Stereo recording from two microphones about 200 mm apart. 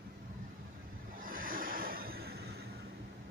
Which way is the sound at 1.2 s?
45° right (ahead or behind).